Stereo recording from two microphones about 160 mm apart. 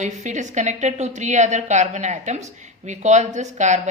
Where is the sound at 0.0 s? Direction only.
45° right (ahead or behind).